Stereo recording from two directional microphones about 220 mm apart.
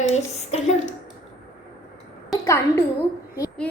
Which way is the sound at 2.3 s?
10° left (ahead or behind).